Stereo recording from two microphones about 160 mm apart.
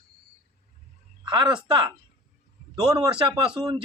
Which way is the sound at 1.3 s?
30° right (ahead or behind).